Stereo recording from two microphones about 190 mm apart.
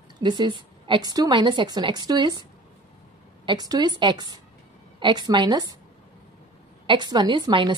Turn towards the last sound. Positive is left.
turn(degrees=-25)  # may be behind; listen again after turning